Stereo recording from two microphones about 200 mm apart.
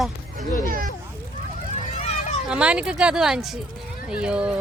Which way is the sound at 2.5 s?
5° right (ahead or behind).